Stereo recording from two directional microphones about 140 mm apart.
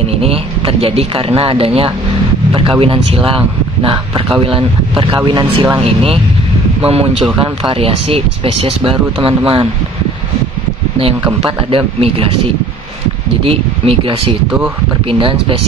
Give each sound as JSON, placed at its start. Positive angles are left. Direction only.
{"t": 0.1, "sound": "speech", "side_deg": -45}
{"t": 6.9, "sound": "speech", "side_deg": -45}
{"t": 11.4, "sound": "speech", "side_deg": -40}
{"t": 13.4, "sound": "speech", "side_deg": -40}